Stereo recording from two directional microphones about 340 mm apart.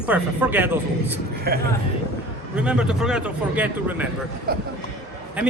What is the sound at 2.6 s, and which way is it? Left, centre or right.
Speech, centre.